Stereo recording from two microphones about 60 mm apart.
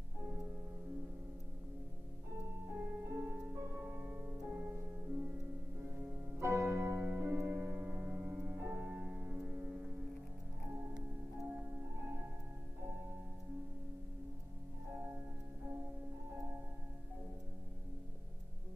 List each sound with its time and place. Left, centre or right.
2.7 s music: right
6.4 s music: right
7.0 s music: right
7.7 s music: right
8.5 s music: right
9.0 s music: right